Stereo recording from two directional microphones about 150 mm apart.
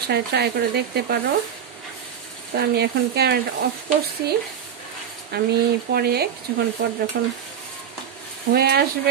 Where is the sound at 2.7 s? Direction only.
90° right.